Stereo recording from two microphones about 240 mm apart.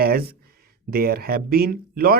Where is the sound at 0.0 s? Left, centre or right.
Right.